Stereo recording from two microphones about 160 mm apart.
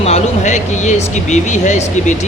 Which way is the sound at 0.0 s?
45° left (ahead or behind).